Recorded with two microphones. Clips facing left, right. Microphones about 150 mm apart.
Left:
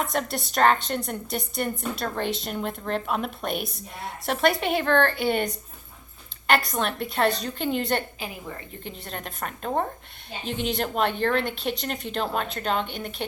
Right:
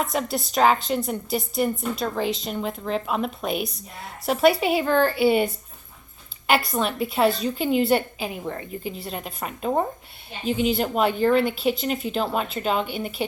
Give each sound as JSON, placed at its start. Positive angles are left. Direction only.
{"t": 0.0, "sound": "a woman's voice", "side_deg": 0}
{"t": 8.2, "sound": "a woman's voice", "side_deg": -30}
{"t": 8.8, "sound": "a woman's voice", "side_deg": -5}